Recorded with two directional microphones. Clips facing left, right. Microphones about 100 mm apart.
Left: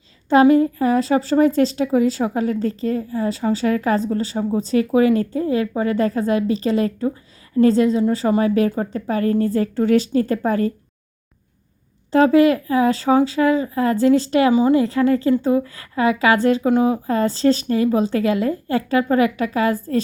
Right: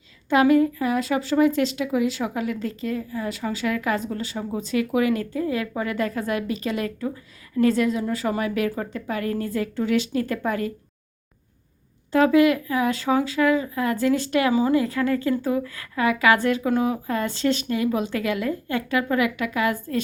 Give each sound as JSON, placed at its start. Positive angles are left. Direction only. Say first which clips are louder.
{"t": 0.3, "sound": "speech", "louder": "left 4 dB", "side_deg": 30}
{"t": 12.1, "sound": "speech", "louder": "left 4 dB", "side_deg": 30}